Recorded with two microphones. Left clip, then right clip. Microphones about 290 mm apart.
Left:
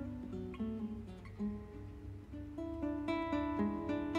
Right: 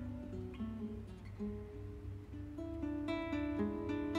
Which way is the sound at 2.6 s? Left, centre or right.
Centre.